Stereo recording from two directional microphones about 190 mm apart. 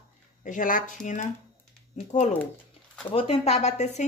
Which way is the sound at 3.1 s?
30° left (ahead or behind).